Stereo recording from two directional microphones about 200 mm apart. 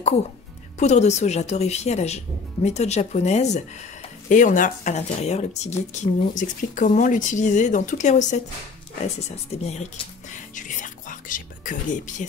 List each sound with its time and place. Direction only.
0.7 s speech: 35° left (ahead or behind)
10.5 s whispering: 40° left (ahead or behind)